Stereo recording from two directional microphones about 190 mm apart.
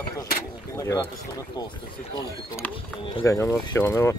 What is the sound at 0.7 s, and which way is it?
Speech, 15° left (ahead or behind).